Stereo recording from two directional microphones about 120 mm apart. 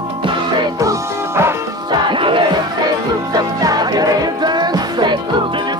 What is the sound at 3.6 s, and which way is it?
Music, 30° right (ahead or behind).